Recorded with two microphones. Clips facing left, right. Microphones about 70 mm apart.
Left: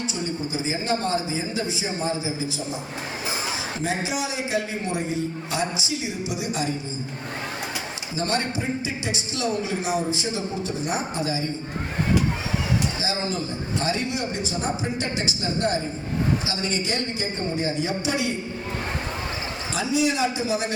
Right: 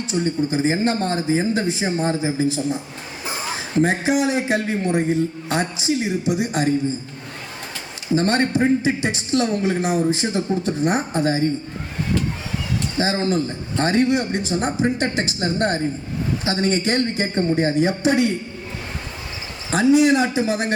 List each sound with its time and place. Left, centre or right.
0.0 s a man's voice: right
8.1 s a man's voice: right
13.0 s a man's voice: right
19.7 s a man's voice: right